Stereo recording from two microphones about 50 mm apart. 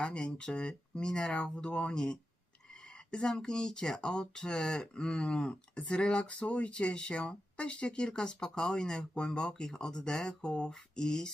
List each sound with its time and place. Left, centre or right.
0.0 s speech: centre